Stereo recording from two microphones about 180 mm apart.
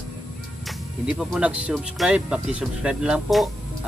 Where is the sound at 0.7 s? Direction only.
5° right (ahead or behind).